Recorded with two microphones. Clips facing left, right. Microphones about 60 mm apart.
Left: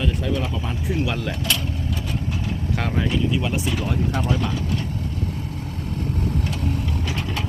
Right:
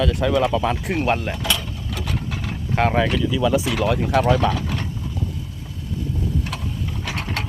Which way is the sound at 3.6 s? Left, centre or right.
Right.